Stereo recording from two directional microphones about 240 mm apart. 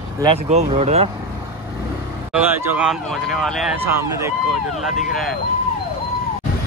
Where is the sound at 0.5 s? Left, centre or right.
Right.